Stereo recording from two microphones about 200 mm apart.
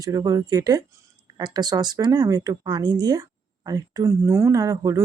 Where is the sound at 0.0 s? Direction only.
15° right (ahead or behind).